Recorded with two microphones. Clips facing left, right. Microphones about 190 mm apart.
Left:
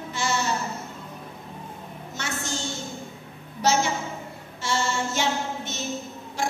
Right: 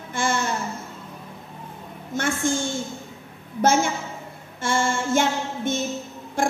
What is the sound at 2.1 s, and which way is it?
Female singing, 50° right (ahead or behind).